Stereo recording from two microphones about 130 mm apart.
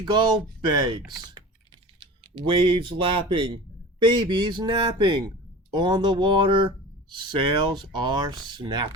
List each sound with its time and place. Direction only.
0.0 s speech: 35° right (ahead or behind)